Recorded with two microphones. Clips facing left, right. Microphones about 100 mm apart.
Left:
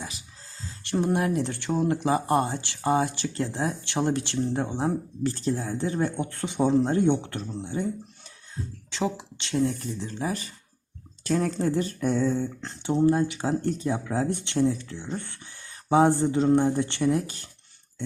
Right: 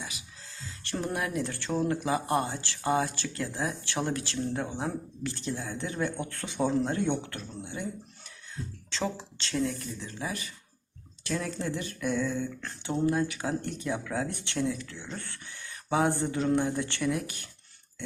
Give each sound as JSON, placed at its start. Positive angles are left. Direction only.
{"t": 0.0, "sound": "music", "side_deg": 35}
{"t": 0.9, "sound": "speech", "side_deg": 20}
{"t": 2.0, "sound": "speech", "side_deg": 35}
{"t": 2.6, "sound": "speech", "side_deg": 20}
{"t": 6.1, "sound": "speech", "side_deg": 20}
{"t": 8.9, "sound": "speech", "side_deg": 15}
{"t": 9.6, "sound": "speech", "side_deg": 30}
{"t": 12.6, "sound": "speech", "side_deg": 20}
{"t": 15.9, "sound": "speech", "side_deg": 30}
{"t": 16.6, "sound": "speech", "side_deg": 40}
{"t": 16.8, "sound": "speech", "side_deg": 25}